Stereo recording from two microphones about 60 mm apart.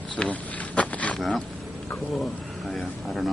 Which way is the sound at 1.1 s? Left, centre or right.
Centre.